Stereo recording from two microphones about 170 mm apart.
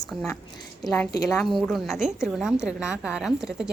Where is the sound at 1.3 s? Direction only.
Centre (ahead or behind).